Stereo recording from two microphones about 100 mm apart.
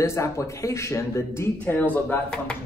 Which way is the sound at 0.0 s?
30° left (ahead or behind).